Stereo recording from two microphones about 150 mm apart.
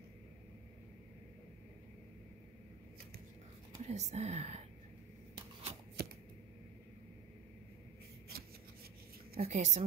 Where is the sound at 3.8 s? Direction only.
50° right (ahead or behind).